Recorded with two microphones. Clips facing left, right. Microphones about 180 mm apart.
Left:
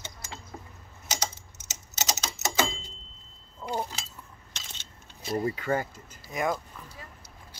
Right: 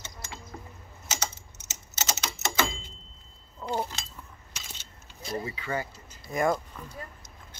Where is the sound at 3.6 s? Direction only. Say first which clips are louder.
Right 1 dB; 5° left (ahead or behind).